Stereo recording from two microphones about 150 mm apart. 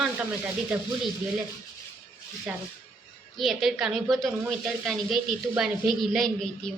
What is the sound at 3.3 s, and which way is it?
Speech, centre (ahead or behind).